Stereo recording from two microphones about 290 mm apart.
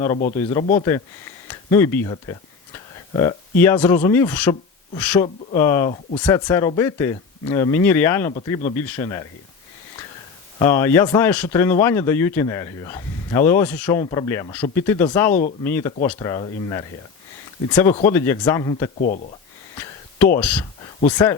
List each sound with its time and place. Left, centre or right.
0.3 s speech: centre
10.6 s speech: centre
18.9 s speech: left
19.7 s a sound: centre
21.0 s speech: centre